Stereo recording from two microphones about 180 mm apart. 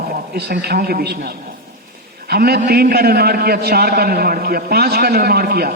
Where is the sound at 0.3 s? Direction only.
60° right (ahead or behind).